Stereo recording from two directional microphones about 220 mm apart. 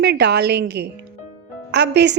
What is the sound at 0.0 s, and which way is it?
A woman's voice, 50° right (ahead or behind).